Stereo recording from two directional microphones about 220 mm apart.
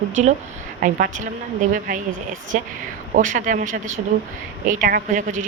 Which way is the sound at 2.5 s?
35° right (ahead or behind).